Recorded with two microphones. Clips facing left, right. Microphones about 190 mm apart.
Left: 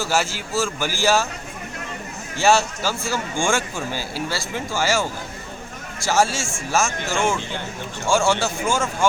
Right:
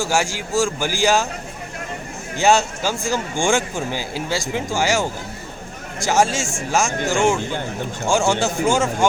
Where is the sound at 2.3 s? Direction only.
15° right (ahead or behind).